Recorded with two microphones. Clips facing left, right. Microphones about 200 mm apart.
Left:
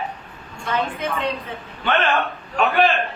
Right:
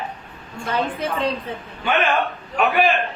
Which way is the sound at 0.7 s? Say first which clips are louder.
Right 1 dB; 35° right (ahead or behind).